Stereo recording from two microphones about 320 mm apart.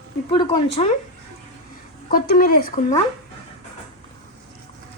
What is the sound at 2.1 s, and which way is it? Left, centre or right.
Speech, left.